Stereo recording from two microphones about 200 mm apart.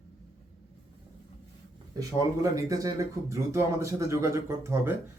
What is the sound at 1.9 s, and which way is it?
Speech, 15° right (ahead or behind).